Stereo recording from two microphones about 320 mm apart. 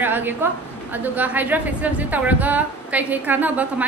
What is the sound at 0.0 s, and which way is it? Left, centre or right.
A woman's voice, centre.